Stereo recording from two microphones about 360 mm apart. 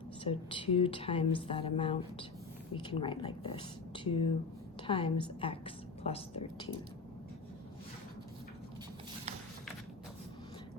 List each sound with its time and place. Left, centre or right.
0.3 s a woman's voice: centre